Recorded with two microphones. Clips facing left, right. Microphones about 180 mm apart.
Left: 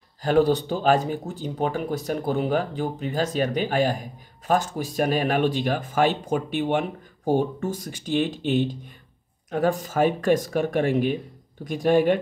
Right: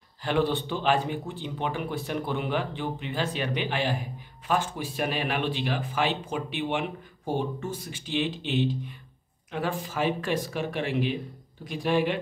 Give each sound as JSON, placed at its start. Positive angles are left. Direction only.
{"t": 0.2, "sound": "speech", "side_deg": 40}